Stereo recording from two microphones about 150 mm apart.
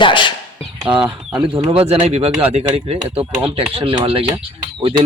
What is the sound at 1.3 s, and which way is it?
Speech, 35° right (ahead or behind).